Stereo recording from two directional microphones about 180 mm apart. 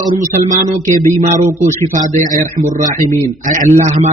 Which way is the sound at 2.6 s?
45° right (ahead or behind).